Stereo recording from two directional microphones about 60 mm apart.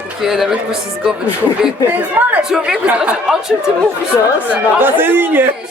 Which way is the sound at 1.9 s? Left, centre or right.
Right.